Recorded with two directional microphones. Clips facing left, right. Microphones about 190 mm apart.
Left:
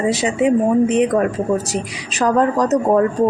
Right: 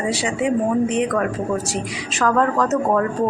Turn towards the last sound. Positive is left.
turn(degrees=20)  # may be behind; listen again after turning